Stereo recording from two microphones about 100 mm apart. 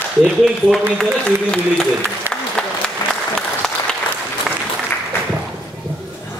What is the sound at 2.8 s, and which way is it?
Applause, 10° left (ahead or behind).